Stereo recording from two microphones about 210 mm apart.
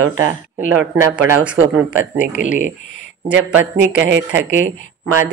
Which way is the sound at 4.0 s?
60° right (ahead or behind).